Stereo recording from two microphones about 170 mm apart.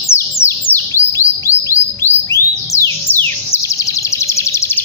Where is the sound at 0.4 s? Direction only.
15° left (ahead or behind).